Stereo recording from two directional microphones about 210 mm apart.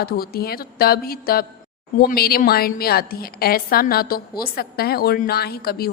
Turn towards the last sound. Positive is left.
turn(degrees=45)  # may be behind; listen again after turning